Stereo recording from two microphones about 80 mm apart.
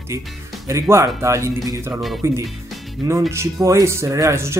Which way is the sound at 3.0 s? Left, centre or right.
Right.